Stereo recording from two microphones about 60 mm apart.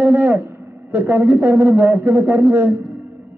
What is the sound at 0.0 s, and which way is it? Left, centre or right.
A man's voice, right.